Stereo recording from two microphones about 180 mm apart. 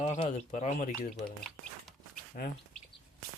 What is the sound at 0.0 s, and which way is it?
Speech, 40° left (ahead or behind).